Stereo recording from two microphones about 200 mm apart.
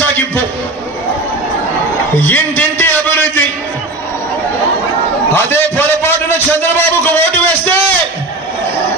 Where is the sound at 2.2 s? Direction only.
10° left (ahead or behind).